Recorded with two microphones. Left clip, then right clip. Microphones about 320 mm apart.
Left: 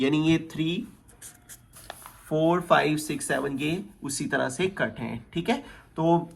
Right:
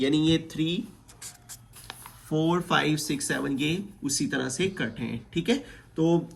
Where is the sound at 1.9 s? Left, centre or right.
Centre.